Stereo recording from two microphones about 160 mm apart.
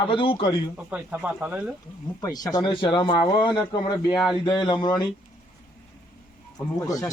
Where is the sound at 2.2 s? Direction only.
20° left (ahead or behind).